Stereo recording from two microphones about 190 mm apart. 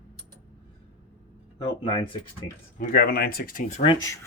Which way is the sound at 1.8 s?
30° left (ahead or behind).